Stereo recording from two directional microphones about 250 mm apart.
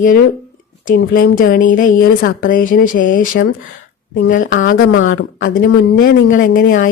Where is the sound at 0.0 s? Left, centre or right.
Left.